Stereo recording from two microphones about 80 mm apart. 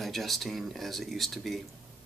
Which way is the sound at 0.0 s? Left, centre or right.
Centre.